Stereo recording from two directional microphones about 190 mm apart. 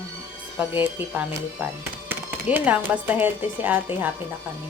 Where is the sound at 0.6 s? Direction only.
10° right (ahead or behind).